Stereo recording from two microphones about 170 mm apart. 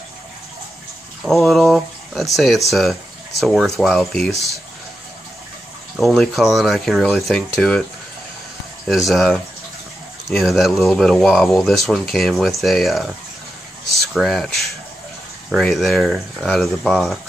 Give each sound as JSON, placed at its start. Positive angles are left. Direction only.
{"t": 1.2, "sound": "speech", "side_deg": 0}
{"t": 5.9, "sound": "speech", "side_deg": 0}
{"t": 8.8, "sound": "speech", "side_deg": 0}